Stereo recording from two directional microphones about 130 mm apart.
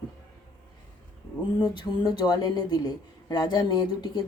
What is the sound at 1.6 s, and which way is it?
Speech, 35° left (ahead or behind).